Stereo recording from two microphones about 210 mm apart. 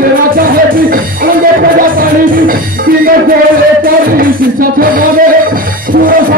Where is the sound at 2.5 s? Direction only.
45° right (ahead or behind).